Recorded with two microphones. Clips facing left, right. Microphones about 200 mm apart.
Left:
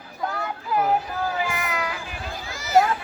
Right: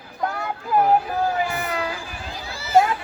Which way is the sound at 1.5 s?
30° right (ahead or behind).